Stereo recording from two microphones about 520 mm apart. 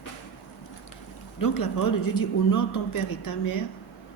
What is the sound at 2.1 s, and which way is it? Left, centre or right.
A woman's voice, left.